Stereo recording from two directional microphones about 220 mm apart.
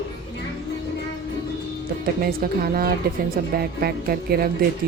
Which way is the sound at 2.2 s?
45° right (ahead or behind).